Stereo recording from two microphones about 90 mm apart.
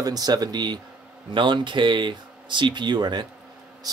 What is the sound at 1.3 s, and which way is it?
Speech, 65° right (ahead or behind).